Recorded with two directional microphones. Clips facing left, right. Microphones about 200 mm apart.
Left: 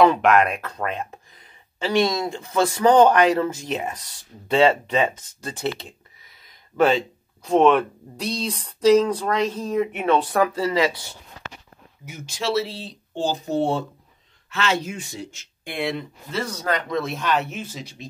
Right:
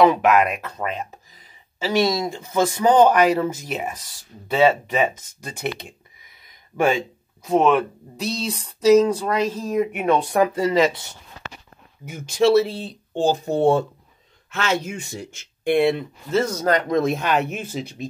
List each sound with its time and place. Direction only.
0.1 s speech: 5° right (ahead or behind); by 11.1 s 20° right (ahead or behind)
12.1 s speech: 55° right (ahead or behind)